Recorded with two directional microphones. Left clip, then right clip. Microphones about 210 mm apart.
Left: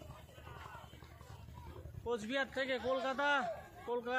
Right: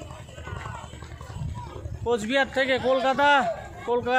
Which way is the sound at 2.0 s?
5° right (ahead or behind).